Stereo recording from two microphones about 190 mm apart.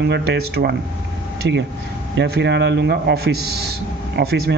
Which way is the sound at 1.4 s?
70° right (ahead or behind).